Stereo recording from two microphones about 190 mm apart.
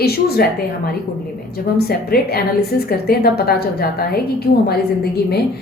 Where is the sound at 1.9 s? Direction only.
55° left (ahead or behind).